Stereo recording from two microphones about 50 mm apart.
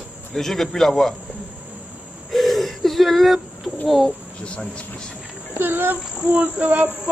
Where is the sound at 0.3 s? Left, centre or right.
Centre.